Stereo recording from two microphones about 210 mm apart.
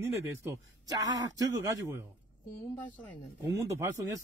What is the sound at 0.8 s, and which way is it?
Speech, 15° right (ahead or behind).